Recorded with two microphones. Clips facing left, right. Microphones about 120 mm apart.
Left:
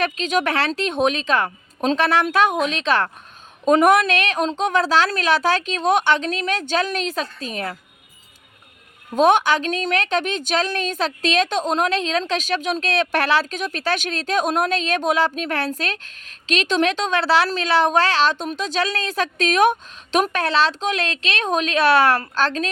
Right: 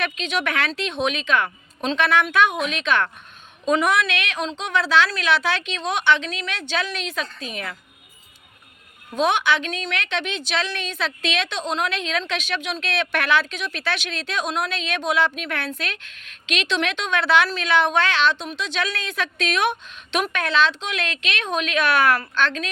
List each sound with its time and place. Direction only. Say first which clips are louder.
0.0 s a woman's voice: left 4 dB; 40° left (ahead or behind)
3.7 s a woman's voice: left 5 dB; 45° left (ahead or behind)
9.1 s a woman's voice: left 5 dB; 45° left (ahead or behind)